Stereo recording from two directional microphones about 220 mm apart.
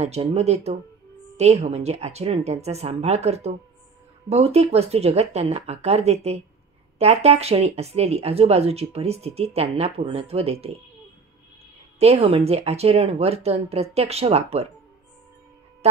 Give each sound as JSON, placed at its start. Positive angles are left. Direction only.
{"t": 0.0, "sound": "speech", "side_deg": -30}
{"t": 12.0, "sound": "speech", "side_deg": -25}
{"t": 15.8, "sound": "speech", "side_deg": -30}